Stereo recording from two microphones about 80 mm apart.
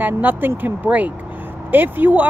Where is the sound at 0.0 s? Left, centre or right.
Right.